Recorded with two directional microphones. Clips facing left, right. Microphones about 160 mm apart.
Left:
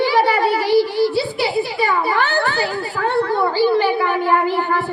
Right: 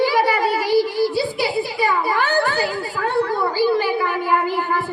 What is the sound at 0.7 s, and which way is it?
Child singing, 45° right (ahead or behind).